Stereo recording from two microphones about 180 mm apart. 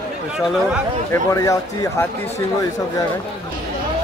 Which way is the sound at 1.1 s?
20° left (ahead or behind).